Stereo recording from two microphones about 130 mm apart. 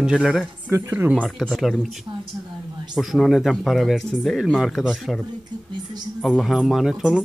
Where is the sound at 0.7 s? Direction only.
15° right (ahead or behind).